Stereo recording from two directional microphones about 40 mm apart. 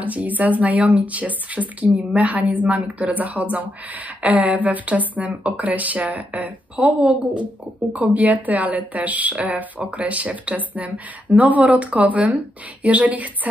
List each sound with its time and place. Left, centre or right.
0.0 s speech: right